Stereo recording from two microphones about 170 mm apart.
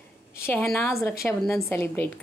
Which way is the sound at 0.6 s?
5° left (ahead or behind).